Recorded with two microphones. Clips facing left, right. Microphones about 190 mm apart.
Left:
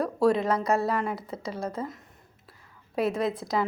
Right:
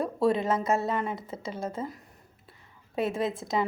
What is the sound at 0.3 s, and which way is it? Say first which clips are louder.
A woman's voice: left 1 dB; 25° right (ahead or behind).